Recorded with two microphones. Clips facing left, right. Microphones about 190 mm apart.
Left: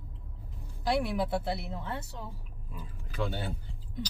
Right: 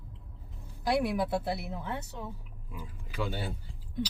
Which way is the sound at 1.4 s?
25° left (ahead or behind).